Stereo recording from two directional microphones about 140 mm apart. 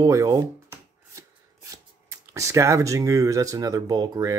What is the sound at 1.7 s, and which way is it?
Speech, 20° right (ahead or behind).